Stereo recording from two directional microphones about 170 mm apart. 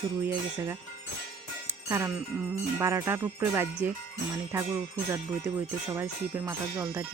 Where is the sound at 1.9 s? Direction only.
15° right (ahead or behind).